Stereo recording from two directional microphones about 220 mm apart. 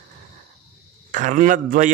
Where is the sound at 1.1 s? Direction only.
35° right (ahead or behind).